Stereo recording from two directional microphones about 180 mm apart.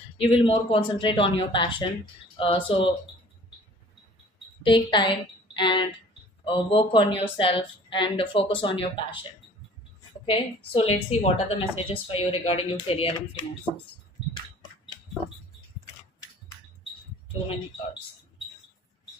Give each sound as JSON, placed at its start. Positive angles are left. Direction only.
{"t": 0.2, "sound": "speech", "side_deg": 30}
{"t": 4.6, "sound": "speech", "side_deg": 25}
{"t": 10.2, "sound": "a woman's voice", "side_deg": 35}